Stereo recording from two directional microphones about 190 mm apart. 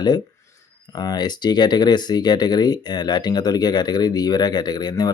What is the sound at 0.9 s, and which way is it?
Speech, 20° left (ahead or behind).